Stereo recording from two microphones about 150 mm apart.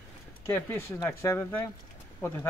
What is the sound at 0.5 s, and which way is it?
A man's voice, 15° left (ahead or behind).